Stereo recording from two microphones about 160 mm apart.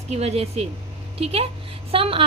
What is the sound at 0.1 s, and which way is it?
A woman's voice, 40° right (ahead or behind).